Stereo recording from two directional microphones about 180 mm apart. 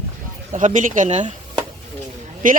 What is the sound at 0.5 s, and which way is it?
Speech, 45° right (ahead or behind).